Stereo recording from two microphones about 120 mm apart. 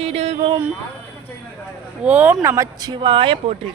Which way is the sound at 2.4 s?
25° right (ahead or behind).